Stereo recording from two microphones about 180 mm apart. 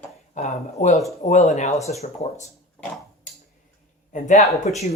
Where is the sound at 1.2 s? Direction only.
40° left (ahead or behind).